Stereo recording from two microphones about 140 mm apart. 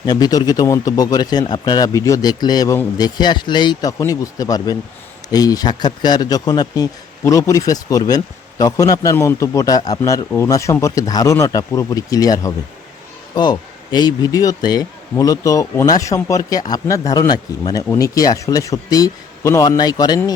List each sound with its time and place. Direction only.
0.0 s speech: 30° left (ahead or behind)